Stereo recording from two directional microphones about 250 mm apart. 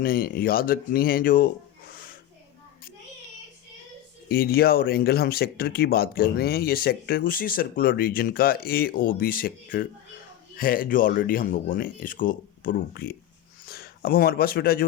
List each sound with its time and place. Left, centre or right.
0.0 s speech: left
1.9 s music: left
4.3 s speech: left